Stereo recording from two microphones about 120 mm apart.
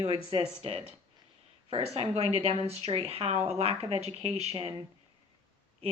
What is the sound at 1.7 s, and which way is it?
A woman's voice, 55° right (ahead or behind).